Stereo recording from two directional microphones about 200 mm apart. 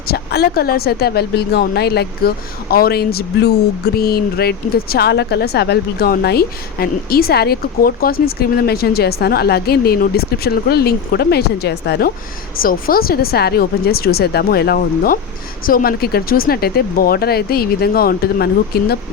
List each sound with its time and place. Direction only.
0.1 s speech: 50° left (ahead or behind)